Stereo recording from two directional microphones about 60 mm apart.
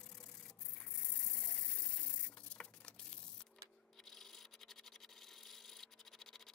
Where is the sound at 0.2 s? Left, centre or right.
Centre.